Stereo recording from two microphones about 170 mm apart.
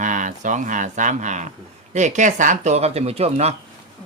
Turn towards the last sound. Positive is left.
turn(degrees=-40)  # may be behind; listen again after turning